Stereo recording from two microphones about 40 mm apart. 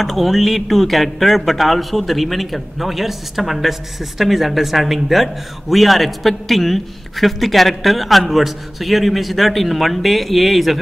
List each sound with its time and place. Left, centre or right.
0.0 s a man's voice: centre